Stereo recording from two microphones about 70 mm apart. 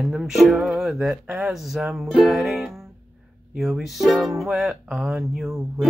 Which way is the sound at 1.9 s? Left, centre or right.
Centre.